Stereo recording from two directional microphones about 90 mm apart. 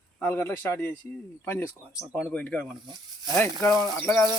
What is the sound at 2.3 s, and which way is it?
Speech, 15° left (ahead or behind).